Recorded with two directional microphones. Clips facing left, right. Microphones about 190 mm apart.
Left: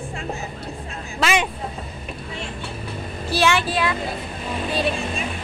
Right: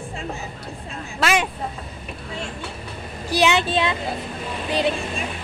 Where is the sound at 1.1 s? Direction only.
Centre (ahead or behind).